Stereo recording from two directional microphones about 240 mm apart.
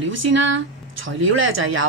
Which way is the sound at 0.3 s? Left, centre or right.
Right.